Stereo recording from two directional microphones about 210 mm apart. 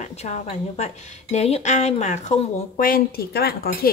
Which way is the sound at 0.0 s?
30° left (ahead or behind).